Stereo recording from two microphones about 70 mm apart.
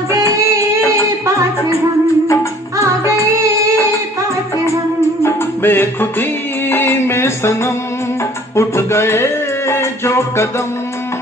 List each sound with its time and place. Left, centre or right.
3.3 s music: right
5.2 s music: left